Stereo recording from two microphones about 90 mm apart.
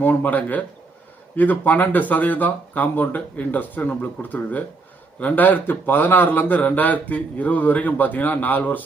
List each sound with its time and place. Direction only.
0.0 s speech: 20° left (ahead or behind)